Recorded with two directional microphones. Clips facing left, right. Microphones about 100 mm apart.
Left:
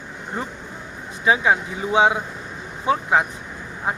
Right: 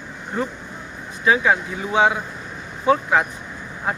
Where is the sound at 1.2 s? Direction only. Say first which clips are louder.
Even; 20° left (ahead or behind).